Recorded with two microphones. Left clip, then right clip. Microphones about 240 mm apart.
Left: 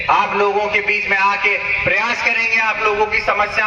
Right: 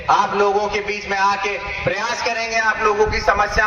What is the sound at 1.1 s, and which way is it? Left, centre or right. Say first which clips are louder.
Speech: left 1 dB; right.